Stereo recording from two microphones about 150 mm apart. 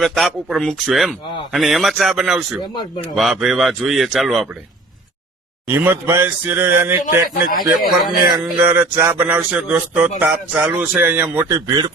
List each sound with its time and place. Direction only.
0.0 s a man's voice: centre (ahead or behind)
5.6 s a man's voice: 15° right (ahead or behind)
7.0 s a man's voice: 70° left (ahead or behind)
8.6 s a man's voice: 15° right (ahead or behind)